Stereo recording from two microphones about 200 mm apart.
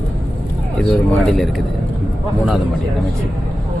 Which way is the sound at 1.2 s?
Centre (ahead or behind).